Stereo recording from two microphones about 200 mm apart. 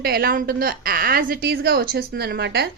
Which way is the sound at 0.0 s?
50° right (ahead or behind).